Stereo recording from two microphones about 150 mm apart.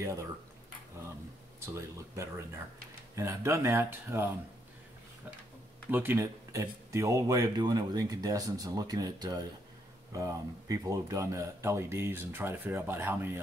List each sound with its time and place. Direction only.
1.7 s speech: 20° right (ahead or behind)
5.9 s speech: 15° right (ahead or behind)